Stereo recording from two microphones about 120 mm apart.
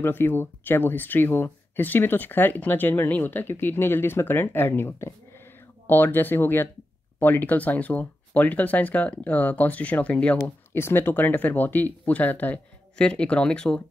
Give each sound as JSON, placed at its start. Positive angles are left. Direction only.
{"t": 0.0, "sound": "speech", "side_deg": 20}